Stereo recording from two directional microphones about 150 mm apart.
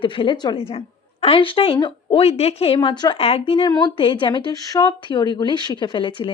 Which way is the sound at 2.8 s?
30° left (ahead or behind).